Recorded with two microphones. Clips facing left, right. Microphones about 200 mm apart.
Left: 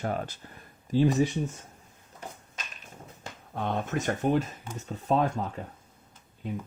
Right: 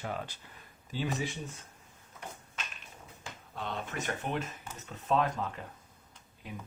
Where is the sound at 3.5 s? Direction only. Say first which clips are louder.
Left 8 dB; 55° left (ahead or behind); by 5.3 s 35° left (ahead or behind).